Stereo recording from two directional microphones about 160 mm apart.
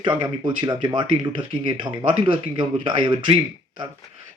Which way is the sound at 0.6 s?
25° right (ahead or behind).